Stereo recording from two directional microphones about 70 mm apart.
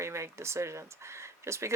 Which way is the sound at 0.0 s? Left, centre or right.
Right.